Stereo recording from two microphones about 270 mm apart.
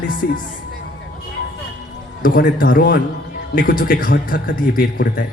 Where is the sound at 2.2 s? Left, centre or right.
Left.